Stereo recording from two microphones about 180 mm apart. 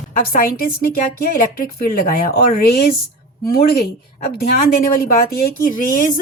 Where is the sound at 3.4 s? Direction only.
55° left (ahead or behind).